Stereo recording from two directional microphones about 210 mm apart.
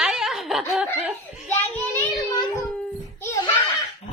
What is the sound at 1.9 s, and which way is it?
Child singing, 15° left (ahead or behind).